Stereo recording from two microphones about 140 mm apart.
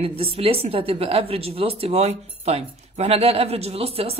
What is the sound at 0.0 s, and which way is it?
A woman's voice, 45° right (ahead or behind).